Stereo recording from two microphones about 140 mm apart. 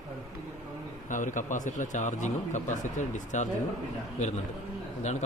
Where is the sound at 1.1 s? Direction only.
65° left (ahead or behind).